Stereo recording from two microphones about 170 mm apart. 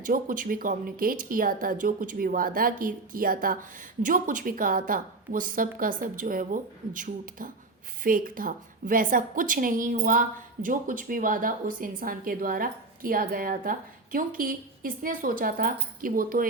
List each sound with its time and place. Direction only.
0.0 s a woman's voice: 55° right (ahead or behind)